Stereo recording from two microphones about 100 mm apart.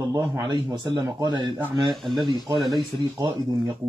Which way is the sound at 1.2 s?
50° right (ahead or behind).